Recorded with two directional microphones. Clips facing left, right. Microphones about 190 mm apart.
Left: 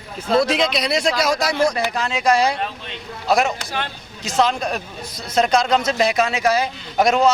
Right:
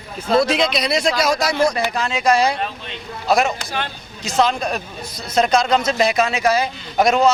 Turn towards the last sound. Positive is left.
turn(degrees=-15)  # may be behind; listen again after turning